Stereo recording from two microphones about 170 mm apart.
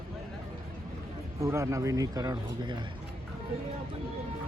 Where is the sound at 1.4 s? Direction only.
15° right (ahead or behind).